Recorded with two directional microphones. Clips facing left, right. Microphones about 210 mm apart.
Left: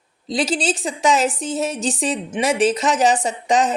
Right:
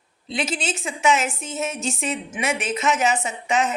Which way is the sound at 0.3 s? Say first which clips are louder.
Left 6 dB; 35° left (ahead or behind).